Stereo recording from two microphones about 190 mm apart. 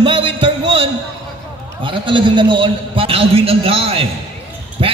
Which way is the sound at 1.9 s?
25° right (ahead or behind).